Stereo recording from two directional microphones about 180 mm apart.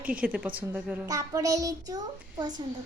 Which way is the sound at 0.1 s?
10° right (ahead or behind).